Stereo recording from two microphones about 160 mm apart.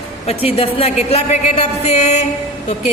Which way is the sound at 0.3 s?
40° left (ahead or behind).